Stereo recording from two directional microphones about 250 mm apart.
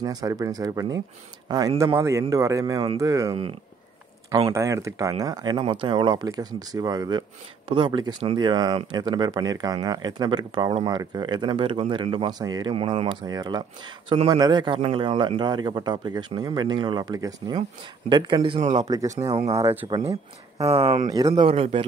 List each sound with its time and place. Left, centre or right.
0.0 s speech: centre
19.6 s speech: centre
19.9 s speech: right